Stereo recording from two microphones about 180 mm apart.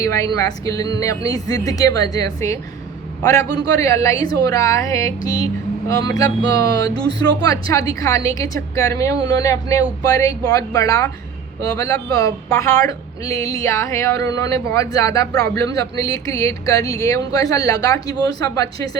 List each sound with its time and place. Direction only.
0.0 s speech: 15° left (ahead or behind)